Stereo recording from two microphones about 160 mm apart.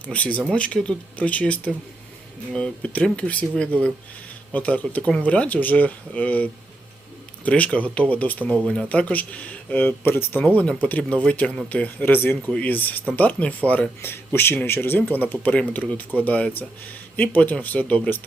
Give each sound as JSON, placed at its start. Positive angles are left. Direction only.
{"t": 0.1, "sound": "speech", "side_deg": 10}